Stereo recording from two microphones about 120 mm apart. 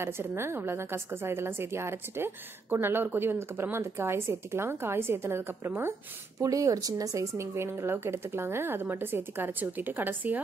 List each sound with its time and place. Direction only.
0.0 s a woman's voice: 20° right (ahead or behind)